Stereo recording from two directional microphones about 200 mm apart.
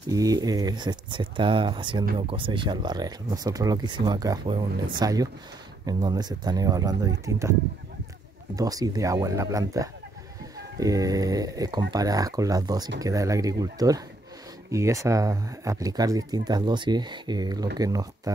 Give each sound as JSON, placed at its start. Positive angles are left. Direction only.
{"t": 0.1, "sound": "speech", "side_deg": -20}
{"t": 8.5, "sound": "speech", "side_deg": -20}